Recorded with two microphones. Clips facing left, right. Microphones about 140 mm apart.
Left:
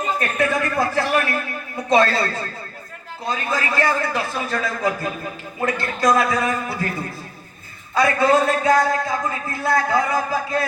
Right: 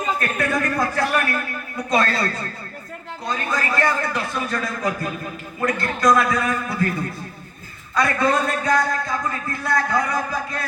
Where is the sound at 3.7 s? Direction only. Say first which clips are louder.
Left 1 dB; 30° left (ahead or behind).